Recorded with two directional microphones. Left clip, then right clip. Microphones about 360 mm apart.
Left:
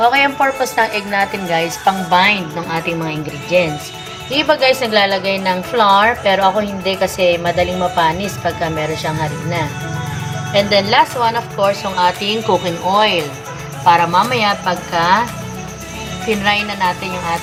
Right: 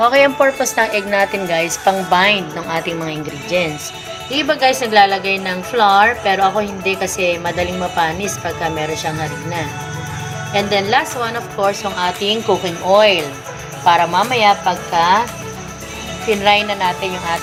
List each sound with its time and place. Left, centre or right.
0.0 s a woman's voice: centre
10.7 s a woman's voice: centre
16.4 s a woman's voice: centre